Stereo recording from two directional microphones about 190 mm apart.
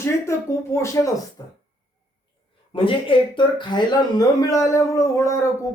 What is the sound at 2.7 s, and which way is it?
Speech, 25° left (ahead or behind).